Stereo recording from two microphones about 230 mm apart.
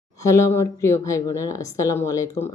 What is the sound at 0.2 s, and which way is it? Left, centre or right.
A woman's voice, centre.